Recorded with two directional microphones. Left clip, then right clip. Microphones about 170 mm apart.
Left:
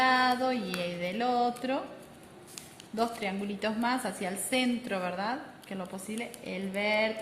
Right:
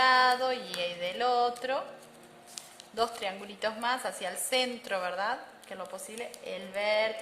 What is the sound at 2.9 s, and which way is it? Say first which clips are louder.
A woman's voice: even; 40° right (ahead or behind).